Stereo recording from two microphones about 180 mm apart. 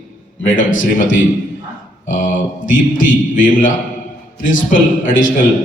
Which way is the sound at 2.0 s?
45° left (ahead or behind).